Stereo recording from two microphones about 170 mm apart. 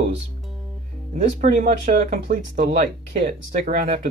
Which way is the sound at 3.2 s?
50° right (ahead or behind).